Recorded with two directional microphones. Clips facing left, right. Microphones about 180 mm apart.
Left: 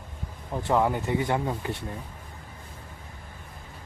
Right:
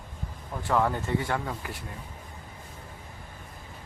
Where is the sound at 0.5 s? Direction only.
20° left (ahead or behind).